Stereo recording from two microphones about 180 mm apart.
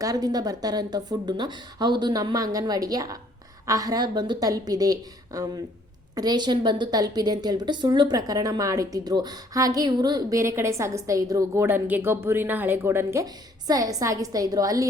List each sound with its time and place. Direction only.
0.0 s a woman's voice: 20° right (ahead or behind)